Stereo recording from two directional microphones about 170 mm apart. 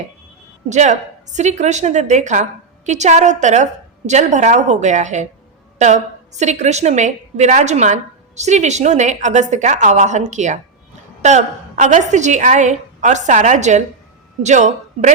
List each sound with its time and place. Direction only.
0.7 s a woman's voice: 45° right (ahead or behind)